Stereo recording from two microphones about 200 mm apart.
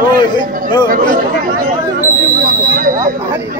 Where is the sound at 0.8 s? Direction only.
45° right (ahead or behind).